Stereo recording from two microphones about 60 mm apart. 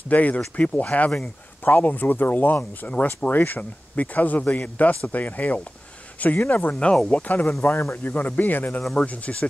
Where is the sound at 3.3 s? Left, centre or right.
Left.